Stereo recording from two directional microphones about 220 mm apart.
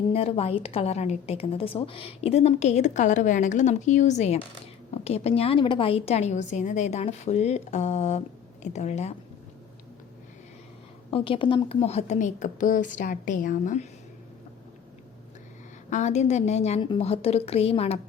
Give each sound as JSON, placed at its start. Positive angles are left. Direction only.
{"t": 0.1, "sound": "a woman's voice", "side_deg": 25}
{"t": 11.1, "sound": "a woman's voice", "side_deg": 25}
{"t": 15.9, "sound": "a woman's voice", "side_deg": 30}